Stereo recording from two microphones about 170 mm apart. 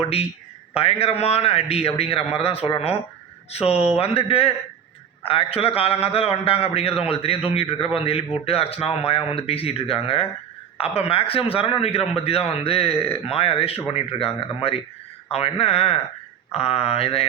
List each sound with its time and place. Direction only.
0.0 s a man's voice: 35° left (ahead or behind)